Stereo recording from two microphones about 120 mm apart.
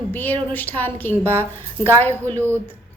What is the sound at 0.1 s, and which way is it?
A woman's voice, 15° left (ahead or behind).